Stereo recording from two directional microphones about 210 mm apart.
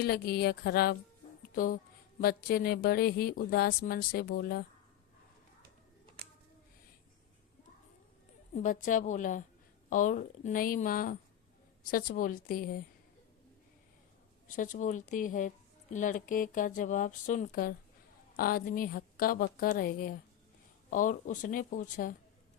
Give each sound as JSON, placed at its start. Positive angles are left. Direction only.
{"t": 0.0, "sound": "speech", "side_deg": 50}
{"t": 1.4, "sound": "music", "side_deg": 40}
{"t": 2.2, "sound": "speech", "side_deg": 45}
{"t": 8.5, "sound": "speech", "side_deg": 40}
{"t": 14.4, "sound": "speech", "side_deg": 40}